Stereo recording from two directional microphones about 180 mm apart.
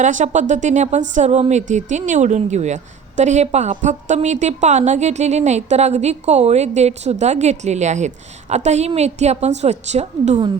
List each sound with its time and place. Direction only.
0.0 s a woman's voice: 45° right (ahead or behind)